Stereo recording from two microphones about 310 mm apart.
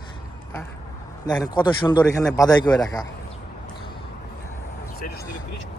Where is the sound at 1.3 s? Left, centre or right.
Centre.